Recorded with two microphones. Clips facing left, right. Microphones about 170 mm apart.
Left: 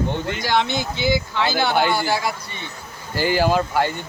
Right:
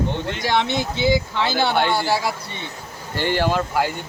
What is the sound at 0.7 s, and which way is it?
Speech, 25° right (ahead or behind).